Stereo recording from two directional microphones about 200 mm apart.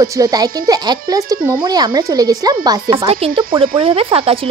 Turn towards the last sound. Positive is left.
turn(degrees=-30)  # may be behind; listen again after turning